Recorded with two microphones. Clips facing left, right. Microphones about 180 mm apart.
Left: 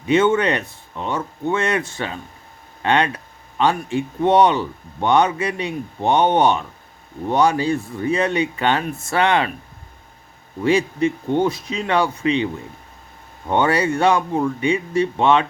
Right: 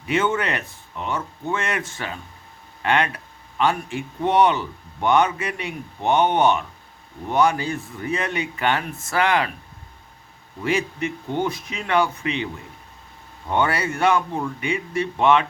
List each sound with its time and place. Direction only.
0.1 s speech: 25° left (ahead or behind)
10.6 s speech: 30° left (ahead or behind)
13.5 s speech: 25° left (ahead or behind)